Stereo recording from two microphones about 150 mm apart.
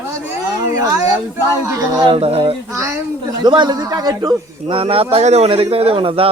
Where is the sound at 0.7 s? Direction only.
20° right (ahead or behind).